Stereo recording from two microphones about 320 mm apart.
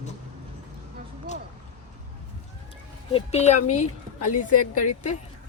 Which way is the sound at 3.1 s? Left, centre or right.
Centre.